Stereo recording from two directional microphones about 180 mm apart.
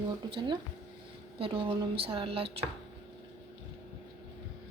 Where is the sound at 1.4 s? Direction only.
30° right (ahead or behind).